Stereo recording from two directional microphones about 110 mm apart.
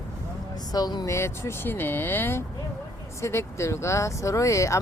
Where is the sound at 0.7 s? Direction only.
35° left (ahead or behind).